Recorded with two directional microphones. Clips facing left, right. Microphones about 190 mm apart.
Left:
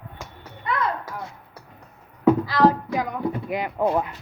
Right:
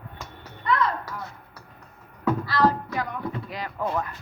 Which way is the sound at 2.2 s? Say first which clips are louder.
Left 5 dB; 15° left (ahead or behind).